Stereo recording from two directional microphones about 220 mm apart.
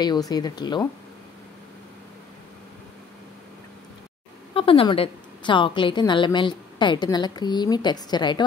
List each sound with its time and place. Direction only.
0.0 s a woman's voice: 20° left (ahead or behind)
4.6 s a woman's voice: 25° left (ahead or behind)